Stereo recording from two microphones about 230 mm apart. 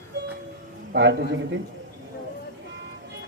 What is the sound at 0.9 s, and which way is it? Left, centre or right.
Speech, right.